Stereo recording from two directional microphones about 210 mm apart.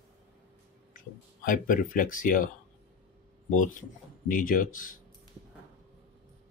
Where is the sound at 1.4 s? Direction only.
40° left (ahead or behind).